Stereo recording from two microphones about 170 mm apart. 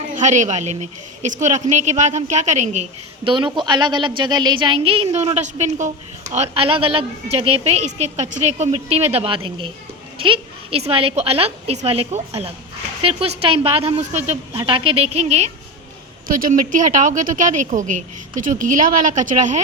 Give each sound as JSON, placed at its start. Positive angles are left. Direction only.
{"t": 0.2, "sound": "a woman's voice", "side_deg": -45}
{"t": 3.2, "sound": "a woman's voice", "side_deg": -30}
{"t": 16.2, "sound": "a woman's voice", "side_deg": -55}